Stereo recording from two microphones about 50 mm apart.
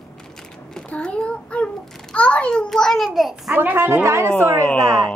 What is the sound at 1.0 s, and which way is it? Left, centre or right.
A child's voice, left.